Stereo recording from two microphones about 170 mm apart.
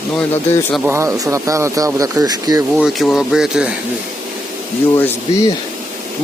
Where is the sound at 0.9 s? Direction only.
15° right (ahead or behind).